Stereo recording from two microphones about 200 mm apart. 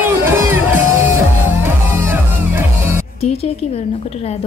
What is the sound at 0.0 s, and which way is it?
Music, 10° right (ahead or behind).